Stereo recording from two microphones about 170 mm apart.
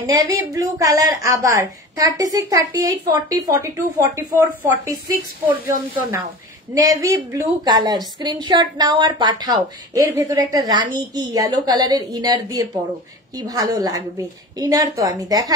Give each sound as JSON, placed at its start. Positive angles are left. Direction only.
{"t": 0.0, "sound": "a woman's voice", "side_deg": -20}
{"t": 6.7, "sound": "a woman's voice", "side_deg": -20}